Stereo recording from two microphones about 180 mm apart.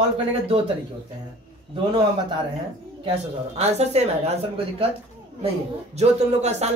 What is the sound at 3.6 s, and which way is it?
A man's voice, 35° right (ahead or behind).